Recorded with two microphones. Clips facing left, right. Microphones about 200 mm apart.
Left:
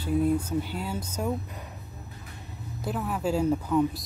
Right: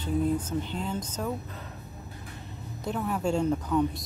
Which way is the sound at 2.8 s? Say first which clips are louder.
Even; centre (ahead or behind).